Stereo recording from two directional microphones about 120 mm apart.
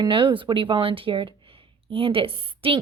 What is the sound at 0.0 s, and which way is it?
Speech, 45° right (ahead or behind).